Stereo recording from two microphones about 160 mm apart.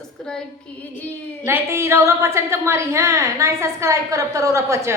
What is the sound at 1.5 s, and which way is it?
A woman's voice, 15° right (ahead or behind).